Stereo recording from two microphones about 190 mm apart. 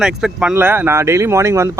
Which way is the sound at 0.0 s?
5° right (ahead or behind).